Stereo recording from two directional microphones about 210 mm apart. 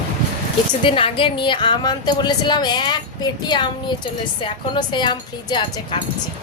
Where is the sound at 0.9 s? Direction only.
25° left (ahead or behind).